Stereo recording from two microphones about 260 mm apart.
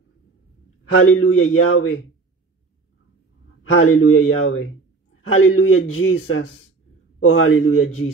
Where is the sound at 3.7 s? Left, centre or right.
Left.